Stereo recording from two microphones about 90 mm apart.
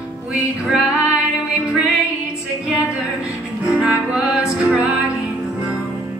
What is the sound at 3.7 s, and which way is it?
Music, 10° right (ahead or behind).